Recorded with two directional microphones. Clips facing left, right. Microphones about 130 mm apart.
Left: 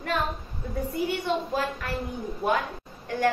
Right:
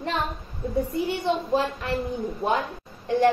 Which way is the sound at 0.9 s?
25° right (ahead or behind).